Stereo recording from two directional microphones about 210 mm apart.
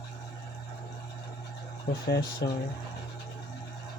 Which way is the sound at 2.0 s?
50° left (ahead or behind).